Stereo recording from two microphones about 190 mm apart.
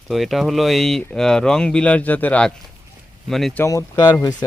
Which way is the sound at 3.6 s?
15° left (ahead or behind).